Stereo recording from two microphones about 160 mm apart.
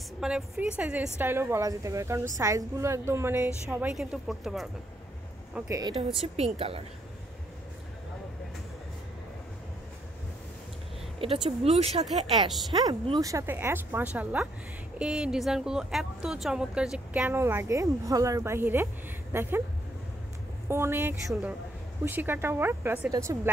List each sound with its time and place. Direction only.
0.2 s a woman's voice: 5° right (ahead or behind)
5.7 s speech: 25° right (ahead or behind)
6.2 s a woman's voice: 40° right (ahead or behind)
11.2 s a woman's voice: 35° right (ahead or behind)
12.7 s speech: 25° right (ahead or behind)
20.6 s speech: 15° right (ahead or behind)